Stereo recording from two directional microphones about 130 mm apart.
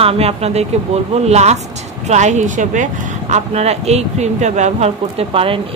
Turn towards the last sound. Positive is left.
turn(degrees=-45)  # may be behind; listen again after turning